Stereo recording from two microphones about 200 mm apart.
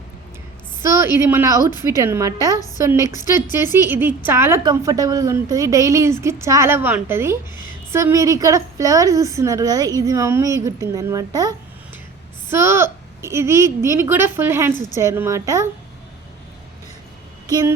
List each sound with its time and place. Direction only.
0.8 s a woman's voice: 15° right (ahead or behind)
17.4 s speech: 15° right (ahead or behind)